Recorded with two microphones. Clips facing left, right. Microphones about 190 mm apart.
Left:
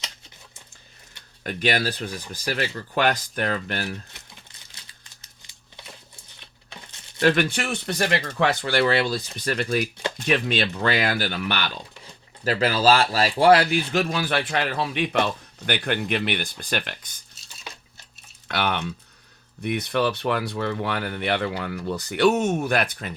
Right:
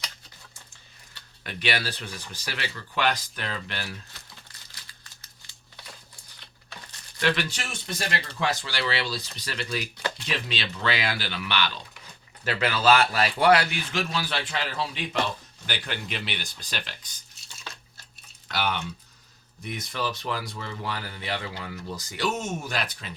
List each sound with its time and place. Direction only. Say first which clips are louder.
1.5 s speech: left 6 dB; 45° left (ahead or behind)
4.1 s crumpling: left 1 dB; 20° left (ahead or behind)
7.2 s speech: left 7 dB; 45° left (ahead or behind); by 8.3 s 75° left (ahead or behind)
8.4 s speech: left 8 dB; 60° left (ahead or behind)
12.5 s speech: left 3 dB; 35° left (ahead or behind); by 17.2 s 55° left (ahead or behind)
17.7 s dishes: left 2 dB; 15° left (ahead or behind)
18.4 s speech: left 3 dB; 60° left (ahead or behind)